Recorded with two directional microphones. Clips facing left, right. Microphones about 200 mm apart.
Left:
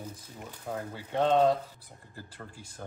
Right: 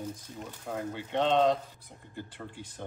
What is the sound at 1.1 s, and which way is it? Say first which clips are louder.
A man's voice: left 1 dB; 10° left (ahead or behind).